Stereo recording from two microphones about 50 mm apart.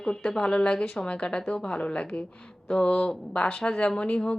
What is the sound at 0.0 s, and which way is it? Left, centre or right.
A woman's voice, centre.